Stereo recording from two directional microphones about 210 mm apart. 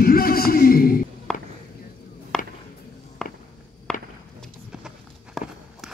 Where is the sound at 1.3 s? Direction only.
5° left (ahead or behind).